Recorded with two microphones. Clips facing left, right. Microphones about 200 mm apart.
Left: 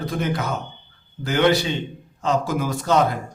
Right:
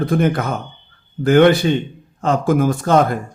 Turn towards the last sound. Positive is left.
turn(degrees=-50)  # may be behind; listen again after turning